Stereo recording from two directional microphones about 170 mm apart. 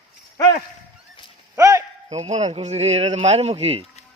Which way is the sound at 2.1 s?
40° right (ahead or behind).